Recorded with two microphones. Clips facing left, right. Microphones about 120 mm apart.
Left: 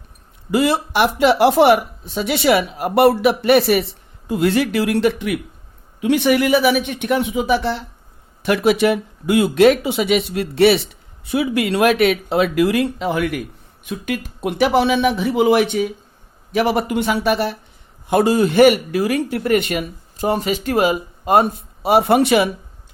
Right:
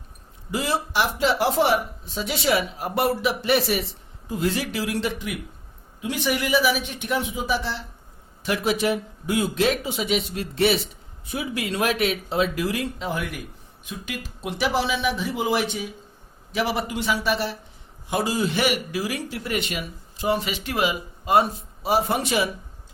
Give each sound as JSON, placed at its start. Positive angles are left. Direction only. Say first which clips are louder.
{"t": 0.5, "sound": "speech", "louder": "left 7 dB", "side_deg": 65}
{"t": 13.8, "sound": "speech", "louder": "left 9 dB", "side_deg": 55}